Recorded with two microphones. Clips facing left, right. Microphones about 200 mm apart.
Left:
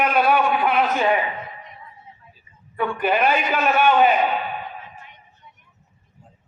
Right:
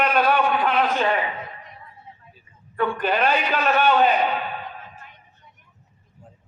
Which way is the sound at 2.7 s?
10° left (ahead or behind).